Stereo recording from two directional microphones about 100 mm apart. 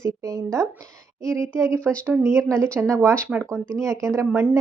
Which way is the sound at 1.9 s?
15° right (ahead or behind).